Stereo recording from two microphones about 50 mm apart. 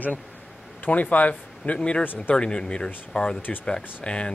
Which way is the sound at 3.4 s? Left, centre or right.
Left.